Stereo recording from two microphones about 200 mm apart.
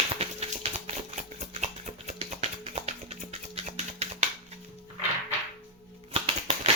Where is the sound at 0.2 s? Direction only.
30° right (ahead or behind).